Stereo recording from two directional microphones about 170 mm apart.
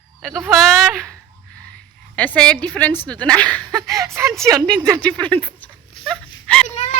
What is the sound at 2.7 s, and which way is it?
Speech, 10° left (ahead or behind).